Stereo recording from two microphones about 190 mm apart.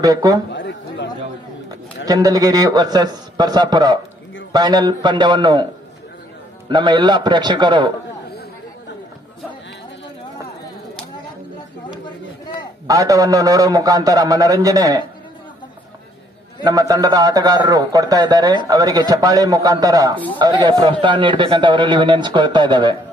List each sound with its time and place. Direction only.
0.0 s a man's voice: 20° right (ahead or behind)
0.5 s chatter: 65° left (ahead or behind)
2.0 s a man's voice: 20° right (ahead or behind)
6.7 s a man's voice: 25° right (ahead or behind)
12.8 s a man's voice: 20° right (ahead or behind)
16.6 s a man's voice: 20° right (ahead or behind)